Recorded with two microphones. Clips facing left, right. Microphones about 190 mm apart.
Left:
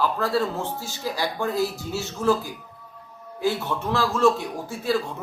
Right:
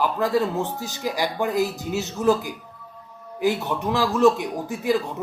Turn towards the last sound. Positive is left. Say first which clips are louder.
# right 2 dB
turn(degrees=-15)  # may be behind; listen again after turning